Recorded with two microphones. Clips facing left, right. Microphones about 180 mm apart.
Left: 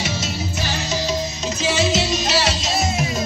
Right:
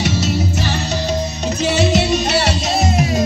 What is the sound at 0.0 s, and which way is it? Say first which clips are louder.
Music: right 7 dB; 65° right (ahead or behind).